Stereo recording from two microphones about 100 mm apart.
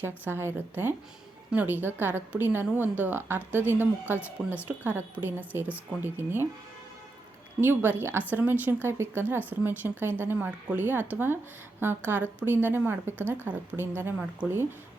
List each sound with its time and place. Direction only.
0.0 s a woman's voice: 25° right (ahead or behind)
7.6 s a woman's voice: 20° right (ahead or behind)